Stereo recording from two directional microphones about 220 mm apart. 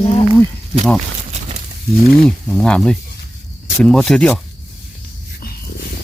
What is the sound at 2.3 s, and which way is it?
Roaring cats, 5° left (ahead or behind).